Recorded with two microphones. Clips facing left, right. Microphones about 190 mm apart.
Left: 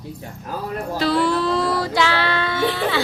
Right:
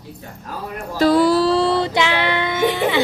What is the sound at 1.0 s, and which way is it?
Child singing, 45° right (ahead or behind).